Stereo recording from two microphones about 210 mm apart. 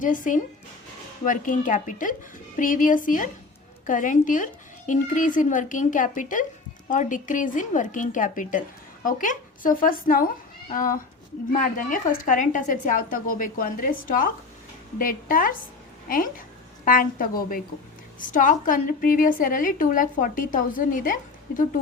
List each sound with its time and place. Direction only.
0.0 s a woman's voice: 40° left (ahead or behind)